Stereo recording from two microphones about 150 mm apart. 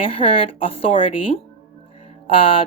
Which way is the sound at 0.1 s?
40° left (ahead or behind).